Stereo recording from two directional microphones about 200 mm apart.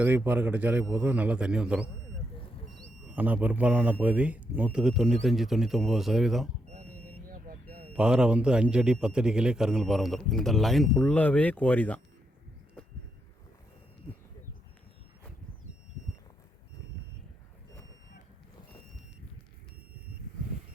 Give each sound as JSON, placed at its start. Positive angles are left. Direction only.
{"t": 0.0, "sound": "a man's voice", "side_deg": -10}
{"t": 3.2, "sound": "a man's voice", "side_deg": -10}
{"t": 7.3, "sound": "smoke detector", "side_deg": -45}
{"t": 7.9, "sound": "a man's voice", "side_deg": -5}
{"t": 12.8, "sound": "a sound", "side_deg": 5}